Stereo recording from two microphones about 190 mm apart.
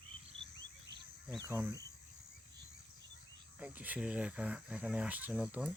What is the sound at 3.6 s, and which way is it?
Speech, 10° right (ahead or behind).